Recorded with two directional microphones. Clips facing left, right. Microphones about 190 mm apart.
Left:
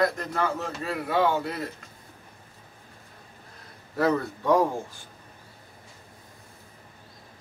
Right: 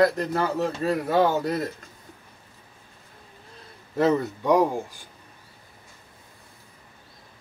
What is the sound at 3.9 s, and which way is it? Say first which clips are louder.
Speech: right 3 dB; 20° right (ahead or behind).